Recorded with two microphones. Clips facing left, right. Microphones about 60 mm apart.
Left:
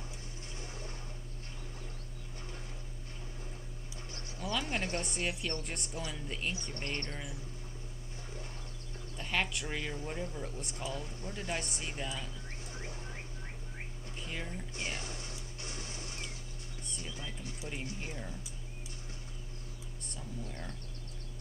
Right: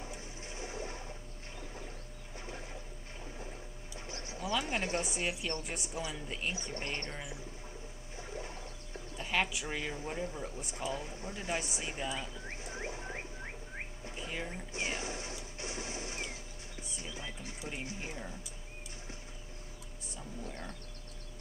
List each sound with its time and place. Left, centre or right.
0.1 s a sound: right
4.1 s speech: centre
6.7 s speech: centre
9.1 s speech: centre
10.6 s speech: centre
10.9 s speech: centre
12.6 s a sound: right
14.1 s a sound: centre
14.7 s speech: centre
15.6 s a sound: right
16.9 s music: centre
17.8 s speech: centre